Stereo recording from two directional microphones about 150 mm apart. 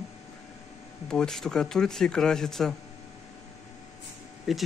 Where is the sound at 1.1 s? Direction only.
5° left (ahead or behind).